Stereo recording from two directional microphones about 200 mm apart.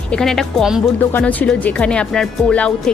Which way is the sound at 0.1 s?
Centre (ahead or behind).